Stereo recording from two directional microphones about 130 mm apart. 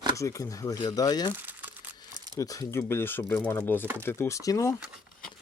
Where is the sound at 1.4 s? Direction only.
15° right (ahead or behind).